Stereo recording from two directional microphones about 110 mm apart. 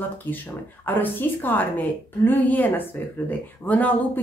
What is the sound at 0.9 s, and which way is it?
Speech, 15° left (ahead or behind).